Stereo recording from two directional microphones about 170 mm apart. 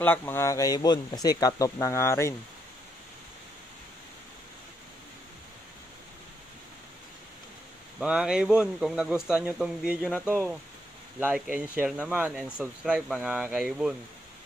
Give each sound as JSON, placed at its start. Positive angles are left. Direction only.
{"t": 0.0, "sound": "speech", "side_deg": 10}
{"t": 8.0, "sound": "a man's voice", "side_deg": -5}